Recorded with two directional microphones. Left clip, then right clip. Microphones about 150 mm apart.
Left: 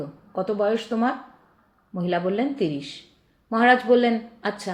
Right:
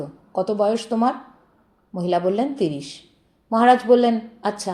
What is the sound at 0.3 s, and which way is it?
Speech, 40° right (ahead or behind).